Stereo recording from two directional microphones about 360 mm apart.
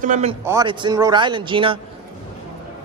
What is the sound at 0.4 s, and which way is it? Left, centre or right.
A man's voice, centre.